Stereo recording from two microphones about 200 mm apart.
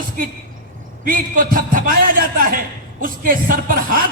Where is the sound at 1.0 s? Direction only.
45° right (ahead or behind).